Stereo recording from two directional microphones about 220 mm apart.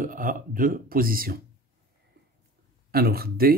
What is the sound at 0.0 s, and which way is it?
Speech, 40° right (ahead or behind).